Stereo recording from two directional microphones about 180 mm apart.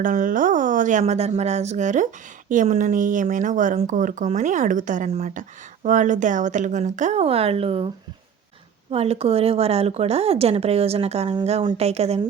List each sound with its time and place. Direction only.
0.0 s speech: 50° right (ahead or behind)
8.9 s speech: 35° right (ahead or behind)